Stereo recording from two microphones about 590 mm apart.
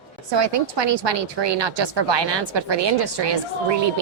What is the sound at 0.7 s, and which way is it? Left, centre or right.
A woman's voice, right.